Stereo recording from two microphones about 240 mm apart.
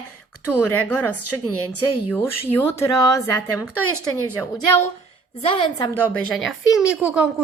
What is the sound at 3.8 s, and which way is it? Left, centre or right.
Speech, left.